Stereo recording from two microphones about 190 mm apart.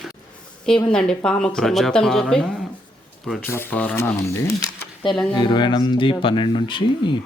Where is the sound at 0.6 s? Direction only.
5° left (ahead or behind); by 7.1 s 25° left (ahead or behind).